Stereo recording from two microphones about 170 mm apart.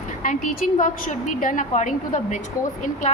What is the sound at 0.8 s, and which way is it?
A woman's voice, 50° left (ahead or behind).